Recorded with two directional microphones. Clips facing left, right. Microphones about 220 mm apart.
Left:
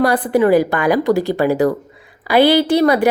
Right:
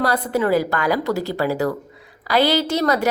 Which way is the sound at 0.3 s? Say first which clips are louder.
Left 7 dB; 15° left (ahead or behind).